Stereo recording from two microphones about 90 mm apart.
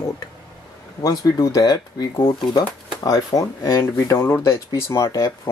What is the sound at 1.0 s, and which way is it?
Speech, 45° left (ahead or behind).